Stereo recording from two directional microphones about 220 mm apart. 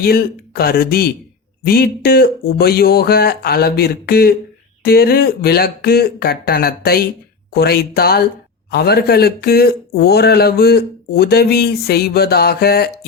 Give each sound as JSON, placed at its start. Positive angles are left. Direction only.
{"t": 0.0, "sound": "speech", "side_deg": 45}